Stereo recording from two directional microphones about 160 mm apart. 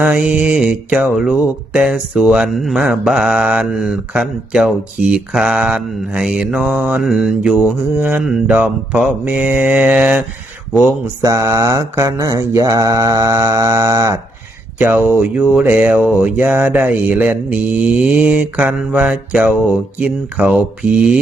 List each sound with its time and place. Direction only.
0.0 s mantra: 5° right (ahead or behind)
0.9 s speech: 5° right (ahead or behind)
11.2 s mantra: 20° right (ahead or behind)